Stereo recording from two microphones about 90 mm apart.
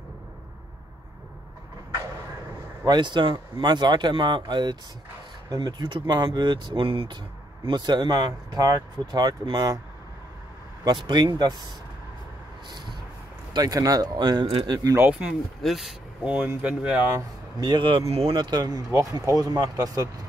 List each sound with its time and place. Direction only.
2.8 s a man's voice: 55° right (ahead or behind); by 7.2 s 90° right
7.7 s speech: 55° right (ahead or behind)
10.8 s a man's voice: 55° right (ahead or behind)
13.5 s speech: 45° right (ahead or behind)
15.0 s speech: 10° right (ahead or behind)
17.6 s speech: 55° right (ahead or behind)